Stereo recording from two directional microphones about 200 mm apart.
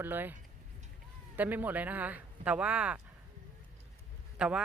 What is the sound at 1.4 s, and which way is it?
A woman's voice, 10° right (ahead or behind).